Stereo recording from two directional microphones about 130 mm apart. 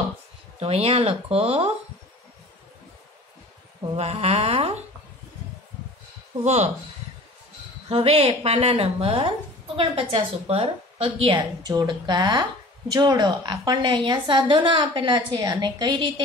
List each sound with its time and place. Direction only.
0.6 s a woman's voice: 50° right (ahead or behind)
3.9 s speech: 55° right (ahead or behind)
6.4 s speech: 60° right (ahead or behind)
7.9 s a woman's voice: 45° right (ahead or behind)
11.3 s a woman's voice: 30° right (ahead or behind)